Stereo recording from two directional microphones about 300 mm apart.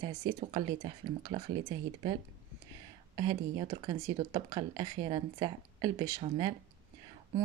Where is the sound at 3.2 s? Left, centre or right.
Centre.